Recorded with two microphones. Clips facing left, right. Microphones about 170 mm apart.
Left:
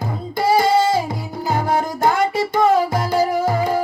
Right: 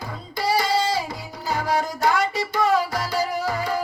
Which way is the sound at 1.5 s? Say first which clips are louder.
Left 3 dB; 50° left (ahead or behind).